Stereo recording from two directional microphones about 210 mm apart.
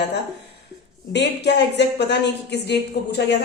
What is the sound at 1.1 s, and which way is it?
A woman's voice, 55° left (ahead or behind).